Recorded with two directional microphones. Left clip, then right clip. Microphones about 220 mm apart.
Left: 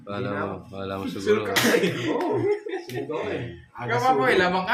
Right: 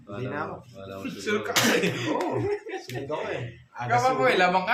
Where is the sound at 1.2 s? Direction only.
25° right (ahead or behind).